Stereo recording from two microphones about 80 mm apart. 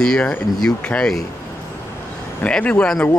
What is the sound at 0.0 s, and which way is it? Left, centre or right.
Speech, centre.